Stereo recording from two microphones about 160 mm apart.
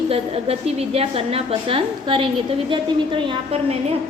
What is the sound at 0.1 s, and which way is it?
A woman's voice, 40° right (ahead or behind).